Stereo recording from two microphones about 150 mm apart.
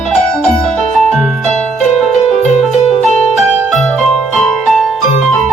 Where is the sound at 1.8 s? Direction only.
Centre (ahead or behind).